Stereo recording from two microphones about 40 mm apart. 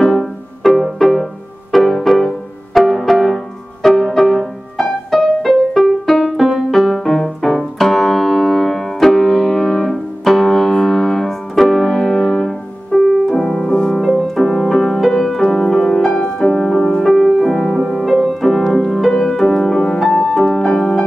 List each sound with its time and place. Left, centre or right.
0.1 s music: centre
5.9 s music: centre
14.3 s music: centre
17.3 s music: centre
17.6 s music: centre
17.8 s music: centre